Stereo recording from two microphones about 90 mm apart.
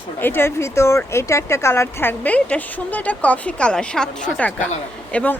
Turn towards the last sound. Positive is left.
turn(degrees=15)  # may be behind; listen again after turning